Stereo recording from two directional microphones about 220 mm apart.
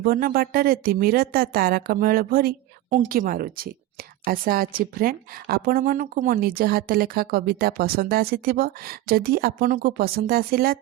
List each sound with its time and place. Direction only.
0.0 s a woman's voice: 45° right (ahead or behind)